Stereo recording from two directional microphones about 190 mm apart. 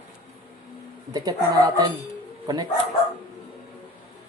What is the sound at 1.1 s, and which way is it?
Speech, 20° right (ahead or behind).